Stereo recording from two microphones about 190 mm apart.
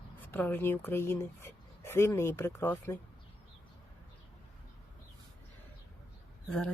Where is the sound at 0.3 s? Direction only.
10° left (ahead or behind).